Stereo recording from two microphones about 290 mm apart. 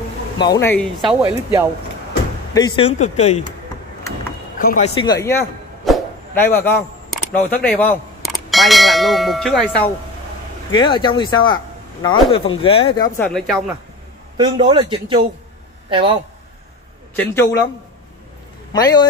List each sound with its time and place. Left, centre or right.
0.4 s speech: centre
2.5 s speech: centre
4.6 s speech: left
5.0 s speech: centre
10.7 s speech: centre
13.3 s speech: centre
14.3 s a man's voice: centre
17.1 s speech: centre
18.7 s a man's voice: centre